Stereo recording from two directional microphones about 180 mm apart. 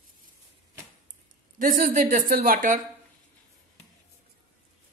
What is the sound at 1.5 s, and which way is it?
A woman's voice, 50° right (ahead or behind).